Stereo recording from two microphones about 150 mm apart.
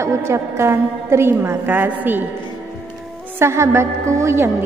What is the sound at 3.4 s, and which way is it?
A woman's voice, 20° right (ahead or behind).